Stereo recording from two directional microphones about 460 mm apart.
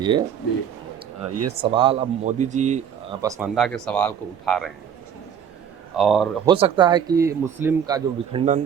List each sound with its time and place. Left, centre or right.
0.0 s speech: centre
1.3 s speech: right
1.7 s speech: centre
6.0 s speech: centre